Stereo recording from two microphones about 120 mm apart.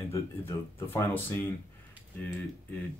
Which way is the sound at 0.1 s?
20° left (ahead or behind).